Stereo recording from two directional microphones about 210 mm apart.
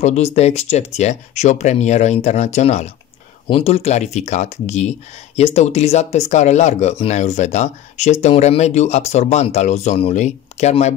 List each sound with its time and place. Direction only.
0.0 s speech: 30° left (ahead or behind)